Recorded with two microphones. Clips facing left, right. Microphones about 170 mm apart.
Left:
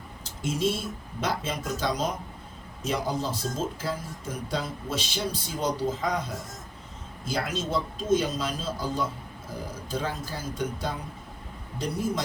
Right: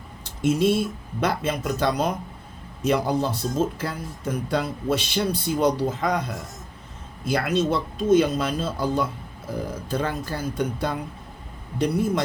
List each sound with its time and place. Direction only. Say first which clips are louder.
0.4 s speech: right 7 dB; 60° right (ahead or behind)
7.3 s speech: right 7 dB; 60° right (ahead or behind)